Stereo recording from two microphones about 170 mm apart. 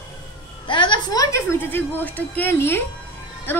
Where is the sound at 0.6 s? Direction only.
25° left (ahead or behind).